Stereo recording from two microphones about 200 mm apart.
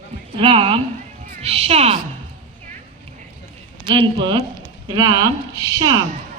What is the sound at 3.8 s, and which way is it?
A woman's voice, 25° right (ahead or behind).